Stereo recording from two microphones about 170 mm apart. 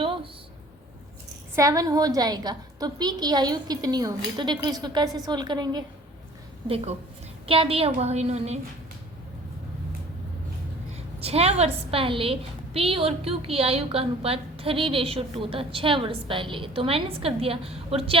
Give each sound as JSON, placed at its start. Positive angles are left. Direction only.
{"t": 1.5, "sound": "a woman's voice", "side_deg": -20}
{"t": 7.4, "sound": "a woman's voice", "side_deg": -35}
{"t": 10.9, "sound": "a woman's voice", "side_deg": -35}